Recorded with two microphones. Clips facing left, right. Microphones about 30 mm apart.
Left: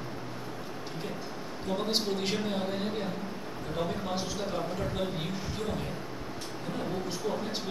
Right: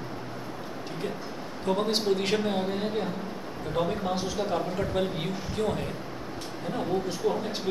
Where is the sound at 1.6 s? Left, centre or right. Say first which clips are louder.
Right 4 dB; centre.